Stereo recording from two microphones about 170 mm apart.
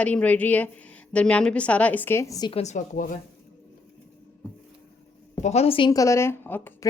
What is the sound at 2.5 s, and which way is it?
Speech, 45° left (ahead or behind).